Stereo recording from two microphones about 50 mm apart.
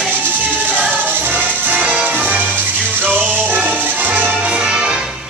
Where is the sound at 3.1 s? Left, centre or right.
Right.